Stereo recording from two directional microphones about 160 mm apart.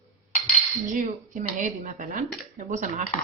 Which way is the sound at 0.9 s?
55° right (ahead or behind).